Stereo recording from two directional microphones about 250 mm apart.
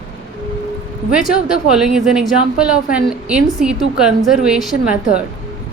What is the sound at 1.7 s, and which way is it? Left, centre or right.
A woman's voice, centre.